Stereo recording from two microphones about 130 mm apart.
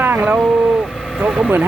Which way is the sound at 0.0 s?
15° right (ahead or behind).